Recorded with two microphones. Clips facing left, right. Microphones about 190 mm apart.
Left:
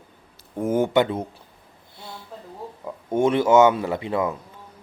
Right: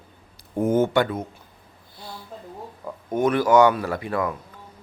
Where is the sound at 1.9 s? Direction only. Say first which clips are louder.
Right 1 dB; 25° left (ahead or behind).